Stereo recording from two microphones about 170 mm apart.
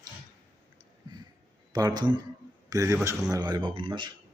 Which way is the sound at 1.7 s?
25° right (ahead or behind).